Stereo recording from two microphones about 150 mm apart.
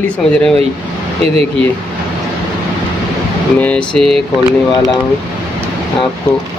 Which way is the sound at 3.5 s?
10° left (ahead or behind).